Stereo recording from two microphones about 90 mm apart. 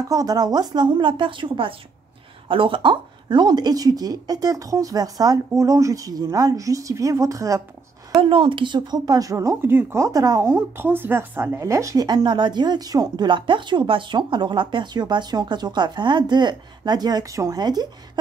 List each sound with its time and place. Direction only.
0.1 s a woman's voice: 45° right (ahead or behind)
8.2 s a woman's voice: 75° right (ahead or behind); by 10.4 s 40° right (ahead or behind)
10.4 s a woman's voice: 25° right (ahead or behind)
17.6 s a woman's voice: 50° right (ahead or behind)